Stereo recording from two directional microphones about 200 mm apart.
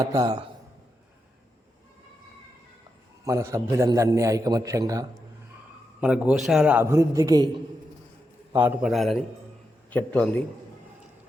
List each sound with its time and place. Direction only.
0.0 s a man's voice: 15° right (ahead or behind)
3.2 s a man's voice: 15° right (ahead or behind)
6.0 s a man's voice: 5° right (ahead or behind)
8.6 s a man's voice: 5° right (ahead or behind)